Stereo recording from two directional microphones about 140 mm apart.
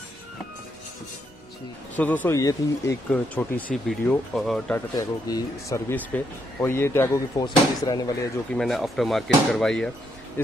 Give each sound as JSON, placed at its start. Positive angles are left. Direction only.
{"t": 2.0, "sound": "speech", "side_deg": 15}
{"t": 3.1, "sound": "speech", "side_deg": 10}
{"t": 4.9, "sound": "a man's voice", "side_deg": 25}
{"t": 7.4, "sound": "a man's voice", "side_deg": 30}
{"t": 8.5, "sound": "speech", "side_deg": 0}